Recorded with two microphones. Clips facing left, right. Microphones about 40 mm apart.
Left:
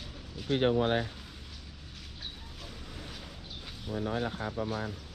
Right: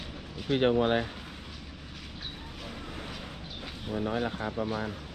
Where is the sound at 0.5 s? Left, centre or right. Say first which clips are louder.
Right 2 dB; right.